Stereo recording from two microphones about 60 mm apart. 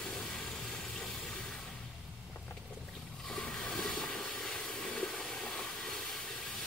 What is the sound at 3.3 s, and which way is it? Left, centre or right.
Train, centre.